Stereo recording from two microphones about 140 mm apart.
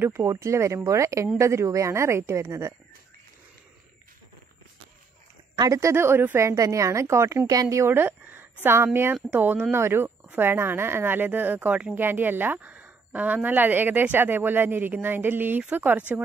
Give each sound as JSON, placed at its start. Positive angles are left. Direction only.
{"t": 0.0, "sound": "a woman's voice", "side_deg": -20}
{"t": 5.6, "sound": "a woman's voice", "side_deg": -25}